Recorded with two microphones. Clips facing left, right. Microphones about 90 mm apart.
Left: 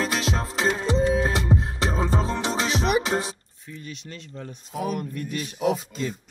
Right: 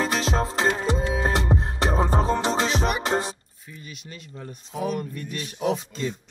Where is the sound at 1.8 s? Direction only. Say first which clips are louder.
Right 2 dB; 50° right (ahead or behind).